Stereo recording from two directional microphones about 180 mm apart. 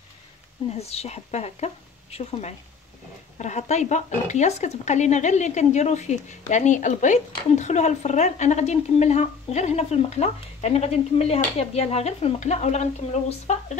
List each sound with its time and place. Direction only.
0.7 s speech: 35° left (ahead or behind)